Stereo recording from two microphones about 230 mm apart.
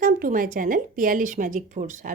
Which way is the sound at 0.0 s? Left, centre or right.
Right.